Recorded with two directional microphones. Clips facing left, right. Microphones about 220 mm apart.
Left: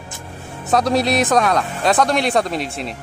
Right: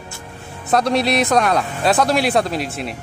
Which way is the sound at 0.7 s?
Centre (ahead or behind).